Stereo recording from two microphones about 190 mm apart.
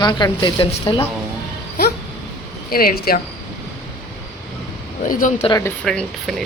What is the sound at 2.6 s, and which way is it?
Speech, 50° left (ahead or behind).